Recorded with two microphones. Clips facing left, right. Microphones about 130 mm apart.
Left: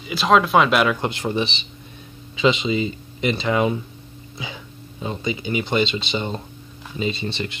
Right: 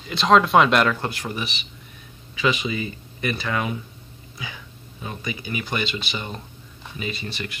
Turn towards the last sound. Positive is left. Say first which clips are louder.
# left 6 dB
turn(degrees=25)  # may be behind; listen again after turning